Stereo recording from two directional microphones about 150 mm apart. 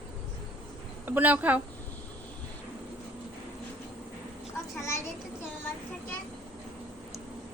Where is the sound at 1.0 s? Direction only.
10° right (ahead or behind).